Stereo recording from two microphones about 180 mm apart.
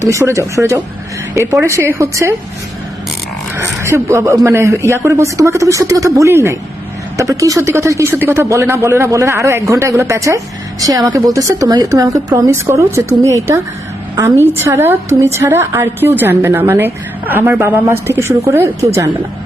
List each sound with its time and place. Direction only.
0.0 s speech: 15° right (ahead or behind)
3.5 s speech: 15° right (ahead or behind)
14.4 s speech: 10° right (ahead or behind)